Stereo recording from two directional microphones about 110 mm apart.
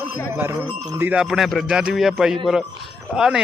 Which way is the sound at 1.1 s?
5° right (ahead or behind).